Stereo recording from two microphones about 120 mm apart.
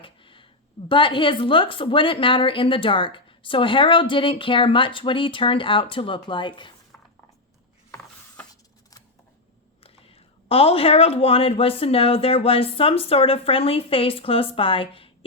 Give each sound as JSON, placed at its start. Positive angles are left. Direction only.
{"t": 0.0, "sound": "a sound", "side_deg": 45}
{"t": 0.9, "sound": "a woman's voice", "side_deg": 45}
{"t": 7.9, "sound": "ratchet", "side_deg": 15}
{"t": 9.8, "sound": "a woman's voice", "side_deg": 55}